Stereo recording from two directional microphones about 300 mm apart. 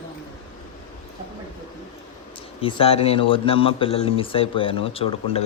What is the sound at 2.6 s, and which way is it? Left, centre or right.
Speech, centre.